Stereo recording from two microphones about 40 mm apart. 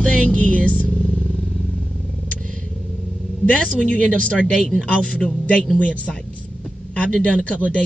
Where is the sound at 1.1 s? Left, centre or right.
Left.